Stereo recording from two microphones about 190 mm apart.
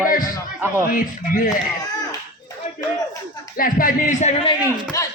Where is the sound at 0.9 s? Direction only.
45° left (ahead or behind).